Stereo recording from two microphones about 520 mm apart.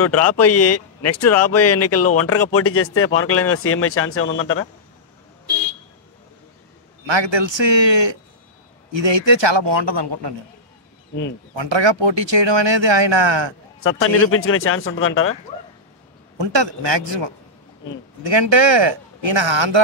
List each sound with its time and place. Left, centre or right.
0.0 s speech: left
7.1 s speech: right
11.5 s speech: right
13.8 s speech: left
16.3 s speech: right